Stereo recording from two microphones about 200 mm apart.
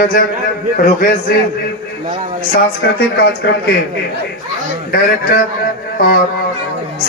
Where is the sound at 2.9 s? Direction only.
55° left (ahead or behind).